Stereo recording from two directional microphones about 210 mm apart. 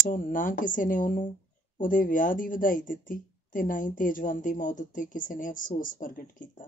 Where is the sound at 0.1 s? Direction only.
40° left (ahead or behind).